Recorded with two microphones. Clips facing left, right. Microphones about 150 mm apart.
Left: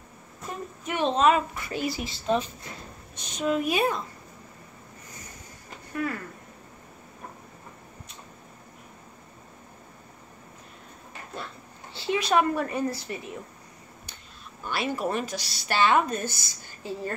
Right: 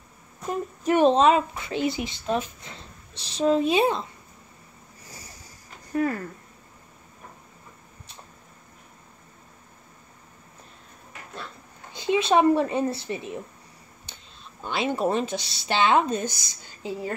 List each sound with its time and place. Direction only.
0.8 s a woman's voice: 40° right (ahead or behind)
1.2 s speech: 25° right (ahead or behind)
2.2 s speech: 10° right (ahead or behind)
2.6 s speech: 30° right (ahead or behind)
11.9 s speech: 20° right (ahead or behind)
14.6 s speech: 20° right (ahead or behind)